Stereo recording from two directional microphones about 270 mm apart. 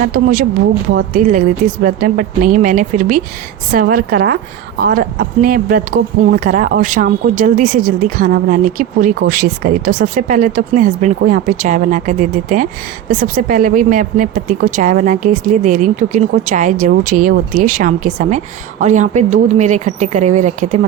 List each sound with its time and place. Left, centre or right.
0.1 s speech: right